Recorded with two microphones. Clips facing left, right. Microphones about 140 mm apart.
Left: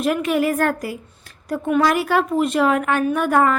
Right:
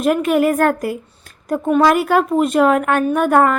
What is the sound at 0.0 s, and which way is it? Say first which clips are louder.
A woman's voice: right 4 dB; 50° right (ahead or behind).